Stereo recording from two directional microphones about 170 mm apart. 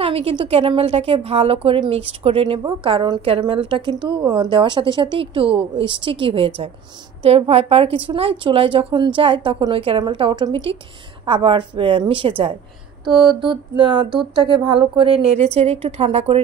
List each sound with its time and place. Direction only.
0.0 s a woman's voice: 35° right (ahead or behind)